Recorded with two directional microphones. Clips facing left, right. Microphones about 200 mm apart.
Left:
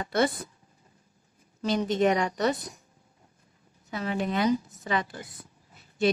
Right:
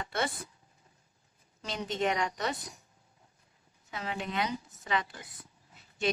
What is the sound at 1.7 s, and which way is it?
Speech, 40° left (ahead or behind).